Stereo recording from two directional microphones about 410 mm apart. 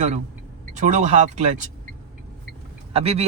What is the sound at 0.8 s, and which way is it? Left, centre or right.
Speech, centre.